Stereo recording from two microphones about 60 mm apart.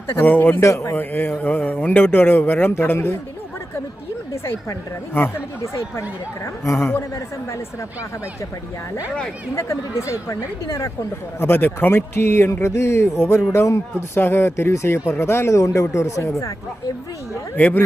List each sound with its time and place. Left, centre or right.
0.1 s a man's voice: left
5.7 s speech: left
9.6 s speech: left
11.3 s a man's voice: left
14.2 s speech: left
17.6 s speech: left